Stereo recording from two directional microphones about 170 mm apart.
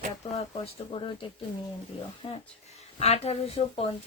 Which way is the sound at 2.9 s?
40° left (ahead or behind).